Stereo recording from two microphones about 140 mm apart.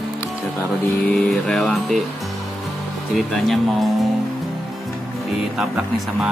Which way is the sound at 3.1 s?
Centre (ahead or behind).